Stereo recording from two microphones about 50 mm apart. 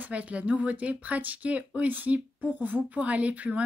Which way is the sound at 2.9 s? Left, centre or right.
Right.